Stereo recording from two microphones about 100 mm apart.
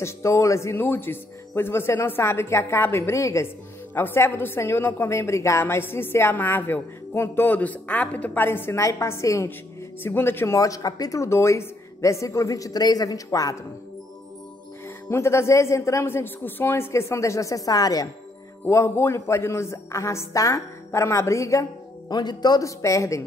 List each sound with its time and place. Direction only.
0.0 s a woman's voice: 30° left (ahead or behind)
15.0 s a woman's voice: 25° left (ahead or behind)
18.7 s a woman's voice: 25° left (ahead or behind)
22.1 s speech: 45° left (ahead or behind)